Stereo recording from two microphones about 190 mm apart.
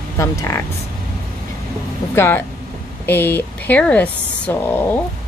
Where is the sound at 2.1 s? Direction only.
10° left (ahead or behind).